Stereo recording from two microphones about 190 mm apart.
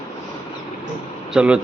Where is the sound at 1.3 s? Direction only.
5° right (ahead or behind).